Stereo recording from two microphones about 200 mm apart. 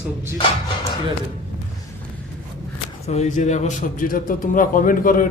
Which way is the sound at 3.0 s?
35° left (ahead or behind).